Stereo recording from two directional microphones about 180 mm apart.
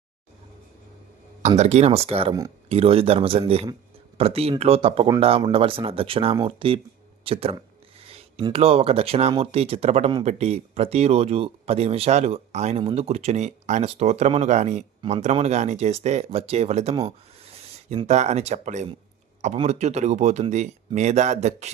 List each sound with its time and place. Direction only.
1.4 s speech: 40° right (ahead or behind)
16.9 s speech: 20° right (ahead or behind)
17.4 s speech: 35° right (ahead or behind)